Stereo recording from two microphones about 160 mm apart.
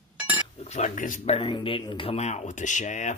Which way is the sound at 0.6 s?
45° left (ahead or behind).